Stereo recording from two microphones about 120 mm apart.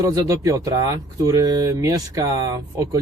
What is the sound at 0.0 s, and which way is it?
A man's voice, 30° right (ahead or behind).